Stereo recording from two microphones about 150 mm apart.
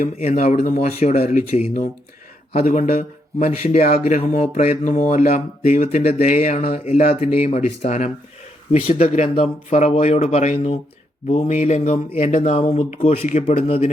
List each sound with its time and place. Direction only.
0.2 s speech: 45° left (ahead or behind)
0.9 s speech: 45° left (ahead or behind)